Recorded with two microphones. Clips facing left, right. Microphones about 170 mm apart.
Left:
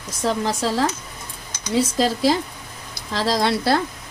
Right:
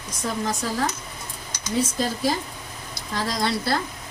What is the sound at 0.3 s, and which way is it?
Speech, 80° left.